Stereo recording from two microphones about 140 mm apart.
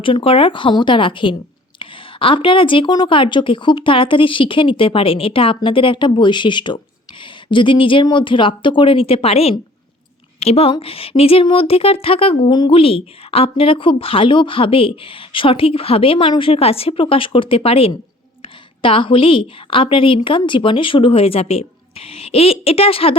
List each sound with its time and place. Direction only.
0.0 s a woman's voice: 40° left (ahead or behind)